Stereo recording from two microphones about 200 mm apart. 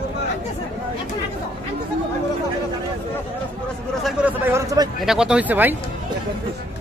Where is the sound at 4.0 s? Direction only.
5° right (ahead or behind).